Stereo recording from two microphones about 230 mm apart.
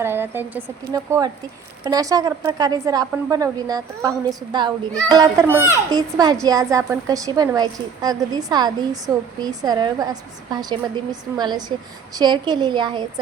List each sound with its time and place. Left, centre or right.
0.0 s a woman's voice: centre